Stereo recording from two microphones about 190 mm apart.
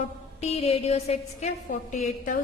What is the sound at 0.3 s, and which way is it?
A woman's voice, 35° left (ahead or behind).